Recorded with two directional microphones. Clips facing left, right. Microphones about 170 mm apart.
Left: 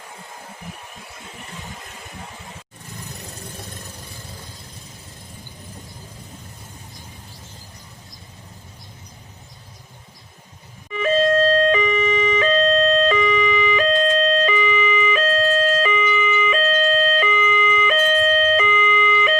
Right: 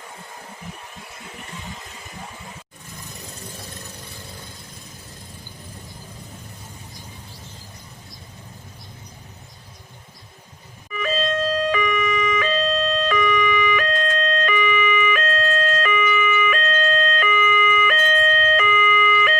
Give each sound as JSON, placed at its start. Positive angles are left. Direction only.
{"t": 11.7, "sound": "siren", "side_deg": 25}